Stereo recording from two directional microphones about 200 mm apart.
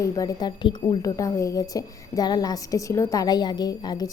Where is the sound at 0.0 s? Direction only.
15° left (ahead or behind).